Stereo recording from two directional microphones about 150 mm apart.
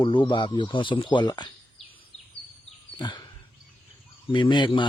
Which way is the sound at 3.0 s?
30° left (ahead or behind).